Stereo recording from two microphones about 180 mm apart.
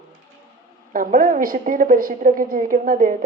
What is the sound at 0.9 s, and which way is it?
A woman's voice, 50° right (ahead or behind).